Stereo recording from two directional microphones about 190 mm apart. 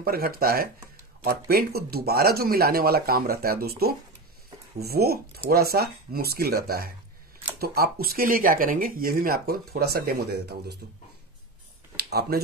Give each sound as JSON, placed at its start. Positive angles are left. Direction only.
{"t": 0.0, "sound": "speech", "side_deg": -50}
{"t": 12.1, "sound": "speech", "side_deg": -55}